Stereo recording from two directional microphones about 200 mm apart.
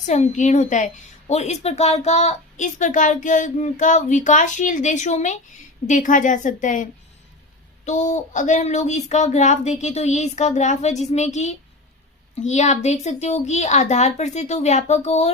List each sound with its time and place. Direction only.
0.0 s speech: 35° left (ahead or behind)
7.9 s speech: 35° left (ahead or behind)